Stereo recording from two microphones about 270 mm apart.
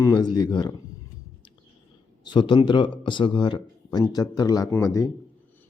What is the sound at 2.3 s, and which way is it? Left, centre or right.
Speech, centre.